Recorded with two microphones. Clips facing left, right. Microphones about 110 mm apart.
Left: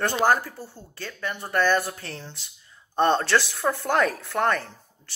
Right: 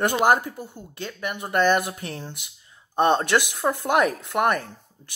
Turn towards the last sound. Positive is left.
turn(degrees=-15)  # may be behind; listen again after turning